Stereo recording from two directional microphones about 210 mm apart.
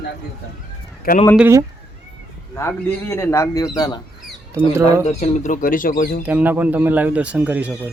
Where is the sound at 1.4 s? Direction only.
10° right (ahead or behind).